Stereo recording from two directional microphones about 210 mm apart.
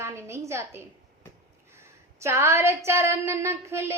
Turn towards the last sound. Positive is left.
turn(degrees=-15)  # may be behind; listen again after turning